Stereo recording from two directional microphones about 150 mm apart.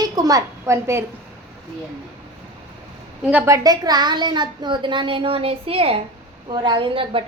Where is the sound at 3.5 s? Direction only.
25° right (ahead or behind).